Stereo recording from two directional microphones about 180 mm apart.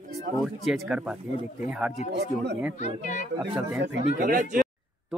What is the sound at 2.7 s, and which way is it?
Speech, 40° left (ahead or behind).